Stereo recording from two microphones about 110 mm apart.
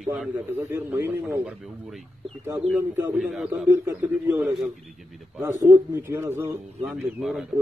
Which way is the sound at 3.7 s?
20° right (ahead or behind).